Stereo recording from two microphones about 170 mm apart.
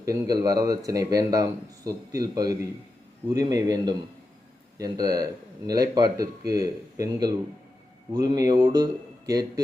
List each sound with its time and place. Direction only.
0.0 s speech: 20° right (ahead or behind)